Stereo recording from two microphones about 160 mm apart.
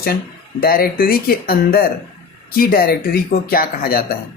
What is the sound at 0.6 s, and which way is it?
Speech, 65° left (ahead or behind).